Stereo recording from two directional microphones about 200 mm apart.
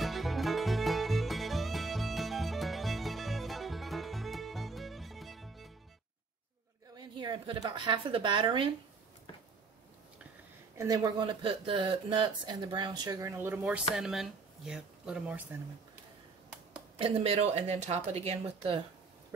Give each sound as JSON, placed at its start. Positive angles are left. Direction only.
{"t": 0.0, "sound": "music", "side_deg": 0}
{"t": 7.0, "sound": "a woman's voice", "side_deg": -20}
{"t": 10.8, "sound": "speech", "side_deg": -20}
{"t": 17.0, "sound": "speech", "side_deg": -30}